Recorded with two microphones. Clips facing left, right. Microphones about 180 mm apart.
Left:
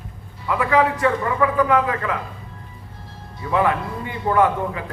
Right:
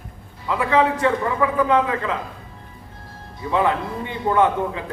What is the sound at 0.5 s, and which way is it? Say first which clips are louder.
A man's voice: even; 25° right (ahead or behind).